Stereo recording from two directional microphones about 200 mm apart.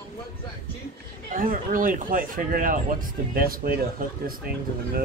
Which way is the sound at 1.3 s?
45° right (ahead or behind).